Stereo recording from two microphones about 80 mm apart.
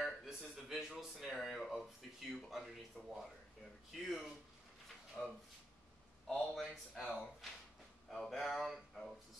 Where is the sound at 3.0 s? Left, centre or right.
Centre.